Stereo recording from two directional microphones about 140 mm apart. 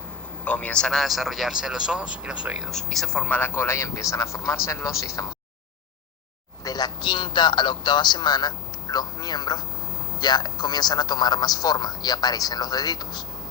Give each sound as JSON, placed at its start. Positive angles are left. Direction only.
{"t": 0.4, "sound": "a man's voice", "side_deg": 10}
{"t": 6.7, "sound": "a man's voice", "side_deg": 30}